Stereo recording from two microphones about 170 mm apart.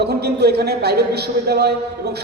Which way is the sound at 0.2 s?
70° right (ahead or behind).